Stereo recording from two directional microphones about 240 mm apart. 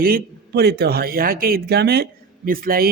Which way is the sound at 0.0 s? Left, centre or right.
Right.